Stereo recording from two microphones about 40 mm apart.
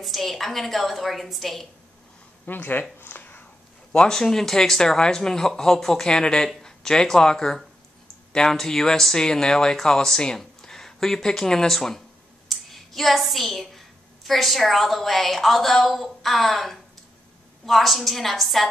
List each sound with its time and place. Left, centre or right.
0.0 s a woman's voice: centre
2.4 s speech: left
4.1 s a woman's voice: centre